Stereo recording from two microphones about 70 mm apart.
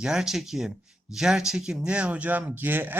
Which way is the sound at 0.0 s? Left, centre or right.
Centre.